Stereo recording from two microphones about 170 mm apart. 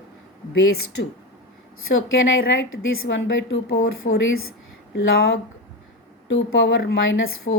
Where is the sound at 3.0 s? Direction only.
90° left.